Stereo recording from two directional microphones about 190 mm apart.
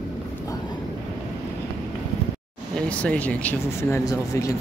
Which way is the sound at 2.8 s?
5° left (ahead or behind).